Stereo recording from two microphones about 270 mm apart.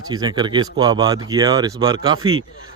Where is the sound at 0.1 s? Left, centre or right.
Centre.